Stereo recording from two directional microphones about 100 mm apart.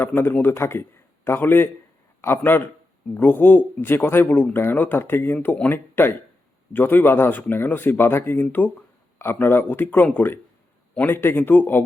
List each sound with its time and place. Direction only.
0.0 s a man's voice: 20° left (ahead or behind)